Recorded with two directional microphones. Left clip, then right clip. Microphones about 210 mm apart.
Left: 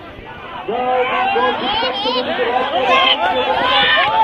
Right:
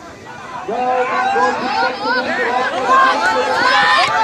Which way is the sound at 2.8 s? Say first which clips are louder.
Right 2 dB; 45° right (ahead or behind).